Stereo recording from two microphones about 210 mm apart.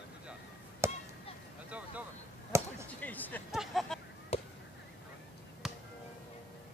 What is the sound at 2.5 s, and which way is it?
Basketball bounce, 15° right (ahead or behind).